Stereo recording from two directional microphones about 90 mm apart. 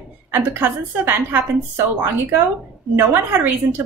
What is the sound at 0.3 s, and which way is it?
A woman's voice, 25° right (ahead or behind).